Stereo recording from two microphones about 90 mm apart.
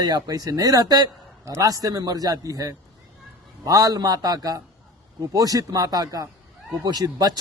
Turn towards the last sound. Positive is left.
turn(degrees=-45)  # may be behind; listen again after turning